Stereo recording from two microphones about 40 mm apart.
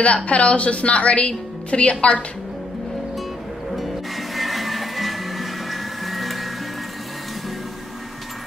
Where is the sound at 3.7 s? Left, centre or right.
Centre.